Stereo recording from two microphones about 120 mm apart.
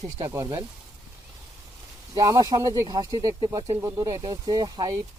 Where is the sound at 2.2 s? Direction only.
30° right (ahead or behind).